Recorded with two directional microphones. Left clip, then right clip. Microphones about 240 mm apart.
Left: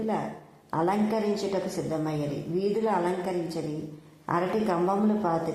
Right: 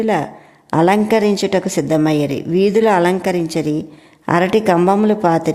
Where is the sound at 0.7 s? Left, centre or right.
Right.